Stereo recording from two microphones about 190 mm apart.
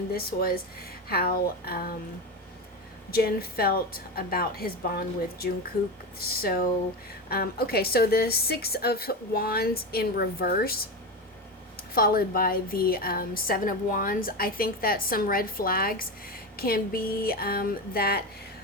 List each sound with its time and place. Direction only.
0.1 s a woman's voice: 50° left (ahead or behind)
3.1 s a woman's voice: 50° left (ahead or behind)
11.9 s a woman's voice: 50° left (ahead or behind)